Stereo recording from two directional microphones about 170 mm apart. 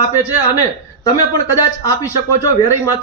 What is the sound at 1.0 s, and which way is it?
A man's voice, 25° left (ahead or behind).